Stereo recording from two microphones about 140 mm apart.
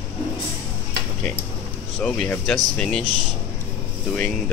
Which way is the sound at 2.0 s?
10° left (ahead or behind).